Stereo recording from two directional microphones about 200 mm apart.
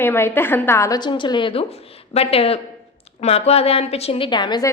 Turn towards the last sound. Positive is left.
turn(degrees=20)  # may be behind; listen again after turning